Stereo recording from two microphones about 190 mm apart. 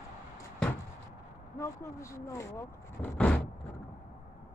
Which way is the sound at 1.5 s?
15° left (ahead or behind).